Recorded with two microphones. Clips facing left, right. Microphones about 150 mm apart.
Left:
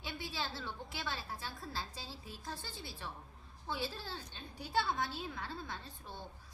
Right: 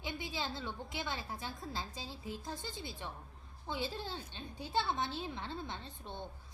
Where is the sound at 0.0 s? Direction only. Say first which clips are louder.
Right 2 dB; 20° right (ahead or behind).